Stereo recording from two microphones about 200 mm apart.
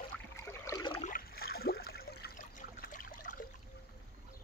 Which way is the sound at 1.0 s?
45° left (ahead or behind).